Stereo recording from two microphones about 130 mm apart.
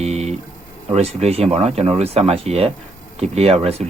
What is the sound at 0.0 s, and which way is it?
Guitar, 55° right (ahead or behind).